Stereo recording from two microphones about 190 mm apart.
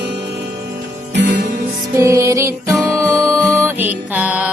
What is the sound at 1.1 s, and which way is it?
Music, 65° right (ahead or behind).